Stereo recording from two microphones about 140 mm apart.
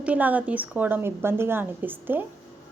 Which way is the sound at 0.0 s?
10° right (ahead or behind).